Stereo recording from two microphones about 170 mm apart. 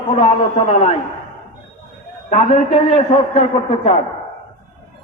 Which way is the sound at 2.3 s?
45° left (ahead or behind).